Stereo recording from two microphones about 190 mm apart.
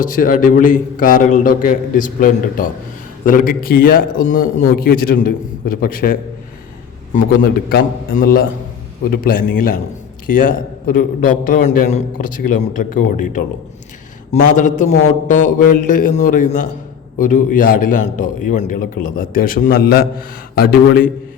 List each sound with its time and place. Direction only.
0.0 s a man's voice: 45° left (ahead or behind)
7.7 s a man's voice: 50° left (ahead or behind)